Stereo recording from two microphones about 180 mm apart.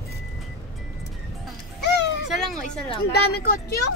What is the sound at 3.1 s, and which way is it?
Speech, 60° left (ahead or behind).